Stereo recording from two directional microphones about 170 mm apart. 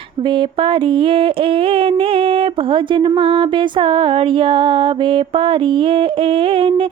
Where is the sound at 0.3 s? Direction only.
30° right (ahead or behind).